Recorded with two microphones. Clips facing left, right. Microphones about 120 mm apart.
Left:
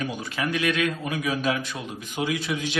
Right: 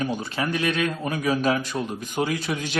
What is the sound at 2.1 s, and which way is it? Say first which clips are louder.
Mantra: right 1 dB; 45° right (ahead or behind).